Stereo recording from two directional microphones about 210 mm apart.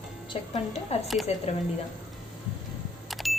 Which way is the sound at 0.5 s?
30° left (ahead or behind).